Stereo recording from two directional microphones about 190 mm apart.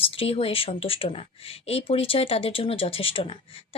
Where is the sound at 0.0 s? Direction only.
30° left (ahead or behind).